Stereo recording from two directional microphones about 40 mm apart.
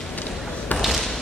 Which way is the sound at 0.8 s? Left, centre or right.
Centre.